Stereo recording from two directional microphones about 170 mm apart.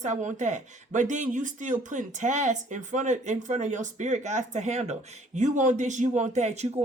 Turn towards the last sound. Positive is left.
turn(degrees=-40)  # may be behind; listen again after turning